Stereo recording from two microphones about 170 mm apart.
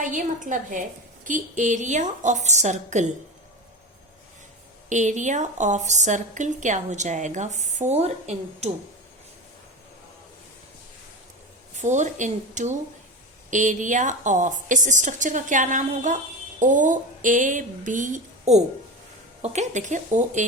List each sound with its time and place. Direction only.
0.0 s a woman's voice: 45° right (ahead or behind)
4.9 s a woman's voice: 45° right (ahead or behind)
11.8 s a woman's voice: 45° right (ahead or behind)